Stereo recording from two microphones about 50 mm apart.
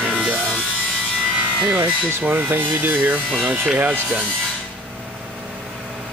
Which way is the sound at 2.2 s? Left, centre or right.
Right.